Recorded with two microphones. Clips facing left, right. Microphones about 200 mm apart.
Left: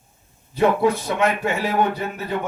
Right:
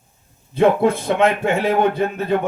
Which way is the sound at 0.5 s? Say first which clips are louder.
Right 3 dB; 55° right (ahead or behind).